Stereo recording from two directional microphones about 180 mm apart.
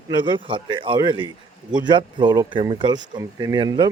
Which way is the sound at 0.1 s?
25° right (ahead or behind).